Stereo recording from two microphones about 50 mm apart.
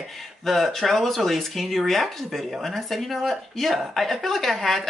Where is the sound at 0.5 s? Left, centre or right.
Centre.